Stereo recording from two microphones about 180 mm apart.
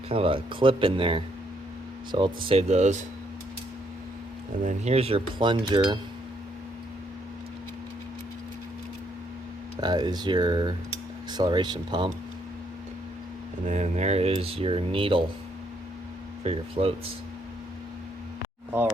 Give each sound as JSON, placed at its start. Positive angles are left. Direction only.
{"t": 0.1, "sound": "speech", "side_deg": -30}
{"t": 4.6, "sound": "speech", "side_deg": -40}
{"t": 9.8, "sound": "speech", "side_deg": -25}
{"t": 13.7, "sound": "speech", "side_deg": -40}
{"t": 16.4, "sound": "speech", "side_deg": -35}